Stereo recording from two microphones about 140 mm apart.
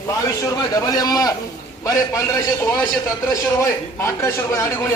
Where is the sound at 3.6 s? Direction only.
20° left (ahead or behind).